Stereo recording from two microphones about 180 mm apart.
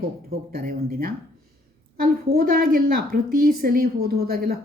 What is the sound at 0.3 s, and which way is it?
A woman's voice, 55° right (ahead or behind).